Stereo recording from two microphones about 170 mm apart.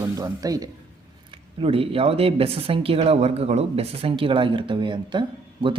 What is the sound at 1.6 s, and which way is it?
Speech, 35° right (ahead or behind).